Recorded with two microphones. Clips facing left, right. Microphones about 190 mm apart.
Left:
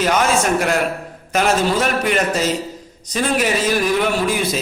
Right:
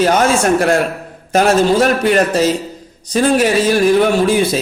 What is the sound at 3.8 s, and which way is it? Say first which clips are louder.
Speech: right 6 dB; 30° right (ahead or behind).